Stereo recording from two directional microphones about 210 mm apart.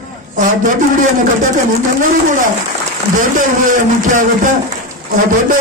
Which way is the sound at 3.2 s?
40° right (ahead or behind).